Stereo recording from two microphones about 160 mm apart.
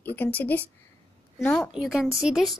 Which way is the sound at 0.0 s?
10° left (ahead or behind).